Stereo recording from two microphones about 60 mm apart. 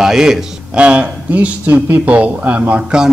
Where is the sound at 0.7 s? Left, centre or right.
Right.